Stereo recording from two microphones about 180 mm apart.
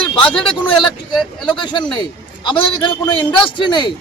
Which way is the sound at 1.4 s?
25° left (ahead or behind).